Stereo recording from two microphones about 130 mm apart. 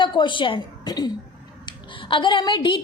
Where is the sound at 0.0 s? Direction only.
40° left (ahead or behind).